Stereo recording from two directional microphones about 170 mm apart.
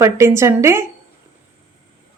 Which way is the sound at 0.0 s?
15° right (ahead or behind).